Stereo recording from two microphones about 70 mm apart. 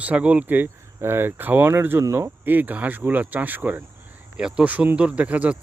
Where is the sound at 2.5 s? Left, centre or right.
Right.